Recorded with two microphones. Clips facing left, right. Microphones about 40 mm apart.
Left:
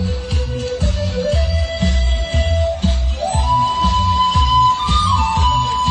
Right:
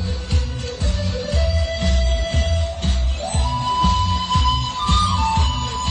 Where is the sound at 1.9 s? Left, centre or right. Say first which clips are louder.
Left 1 dB; centre.